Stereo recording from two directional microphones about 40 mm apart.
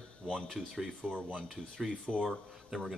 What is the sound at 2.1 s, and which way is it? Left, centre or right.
Speech, centre.